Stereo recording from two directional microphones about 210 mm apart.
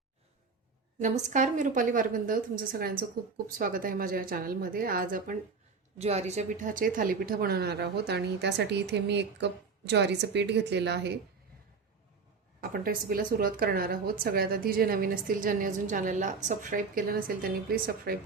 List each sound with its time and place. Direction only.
0.9 s a woman's voice: 35° right (ahead or behind)
6.0 s a woman's voice: 30° right (ahead or behind); by 11.2 s 55° right (ahead or behind)
12.7 s a woman's voice: 45° right (ahead or behind)